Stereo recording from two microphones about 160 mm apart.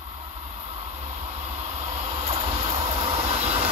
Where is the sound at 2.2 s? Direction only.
40° right (ahead or behind).